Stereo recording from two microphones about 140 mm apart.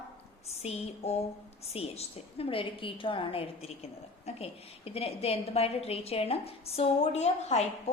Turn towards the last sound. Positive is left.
turn(degrees=50)  # may be behind; listen again after turning